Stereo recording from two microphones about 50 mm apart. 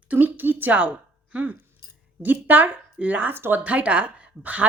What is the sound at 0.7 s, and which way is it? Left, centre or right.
Speech, right.